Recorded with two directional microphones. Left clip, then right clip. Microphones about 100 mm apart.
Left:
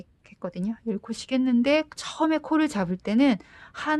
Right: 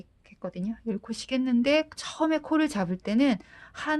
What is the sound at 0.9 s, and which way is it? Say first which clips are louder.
Speech: left 2 dB; 30° left (ahead or behind).